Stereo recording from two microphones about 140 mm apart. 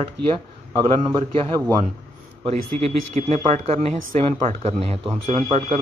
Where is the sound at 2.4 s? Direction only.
45° right (ahead or behind).